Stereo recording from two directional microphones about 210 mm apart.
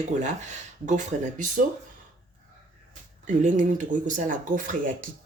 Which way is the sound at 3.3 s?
35° right (ahead or behind).